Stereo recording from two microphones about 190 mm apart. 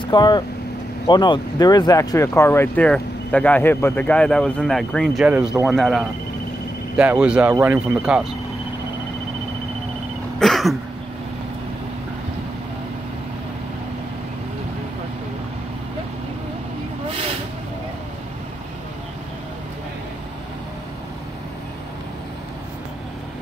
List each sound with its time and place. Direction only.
0.1 s speech: 20° left (ahead or behind); by 8.3 s 5° right (ahead or behind)
10.4 s throat clearing: centre (ahead or behind)